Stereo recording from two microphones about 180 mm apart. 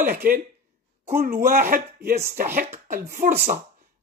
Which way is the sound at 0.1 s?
50° right (ahead or behind).